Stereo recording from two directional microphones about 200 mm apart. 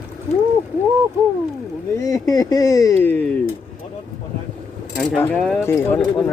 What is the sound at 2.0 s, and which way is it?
Speech, 15° left (ahead or behind).